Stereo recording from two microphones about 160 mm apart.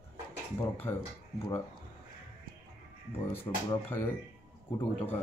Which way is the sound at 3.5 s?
20° left (ahead or behind).